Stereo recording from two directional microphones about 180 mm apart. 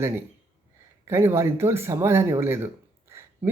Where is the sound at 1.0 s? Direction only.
15° right (ahead or behind).